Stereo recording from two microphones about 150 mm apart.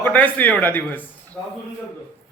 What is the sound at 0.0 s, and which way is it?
A man's voice, 10° left (ahead or behind).